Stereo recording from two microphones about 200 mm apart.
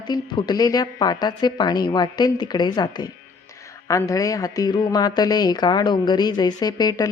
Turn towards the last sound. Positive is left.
turn(degrees=20)  # may be behind; listen again after turning